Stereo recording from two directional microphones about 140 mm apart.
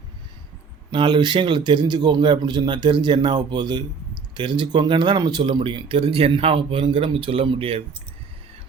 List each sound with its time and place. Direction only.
0.9 s speech: 35° right (ahead or behind)